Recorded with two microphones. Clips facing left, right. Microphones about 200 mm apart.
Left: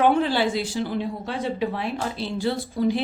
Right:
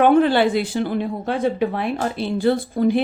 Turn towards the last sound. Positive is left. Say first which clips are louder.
# right 5 dB
turn(degrees=-55)  # may be behind; listen again after turning